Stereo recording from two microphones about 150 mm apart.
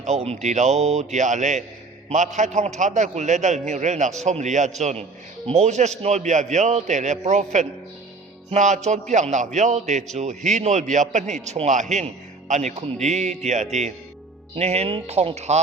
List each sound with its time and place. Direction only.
0.0 s a man's voice: 50° right (ahead or behind)